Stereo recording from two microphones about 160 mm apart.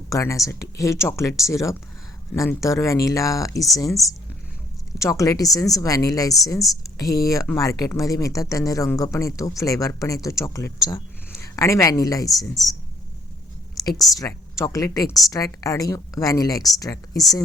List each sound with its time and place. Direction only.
0.1 s speech: 20° left (ahead or behind)
4.9 s speech: 20° left (ahead or behind)
14.0 s speech: 20° left (ahead or behind)